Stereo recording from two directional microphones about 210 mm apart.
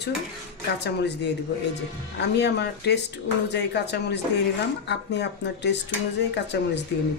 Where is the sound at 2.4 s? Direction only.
55° left (ahead or behind).